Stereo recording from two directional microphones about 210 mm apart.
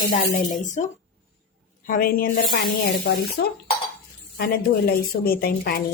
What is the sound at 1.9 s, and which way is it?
A woman's voice, 45° left (ahead or behind).